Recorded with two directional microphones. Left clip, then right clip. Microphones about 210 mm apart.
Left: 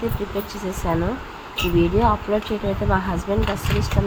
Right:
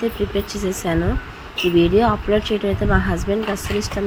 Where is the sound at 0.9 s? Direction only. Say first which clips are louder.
Left 1 dB; 15° right (ahead or behind).